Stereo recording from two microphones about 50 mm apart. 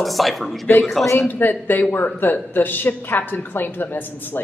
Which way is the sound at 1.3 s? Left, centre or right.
Left.